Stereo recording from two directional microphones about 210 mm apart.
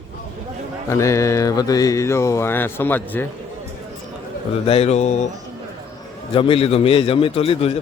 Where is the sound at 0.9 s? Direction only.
15° left (ahead or behind).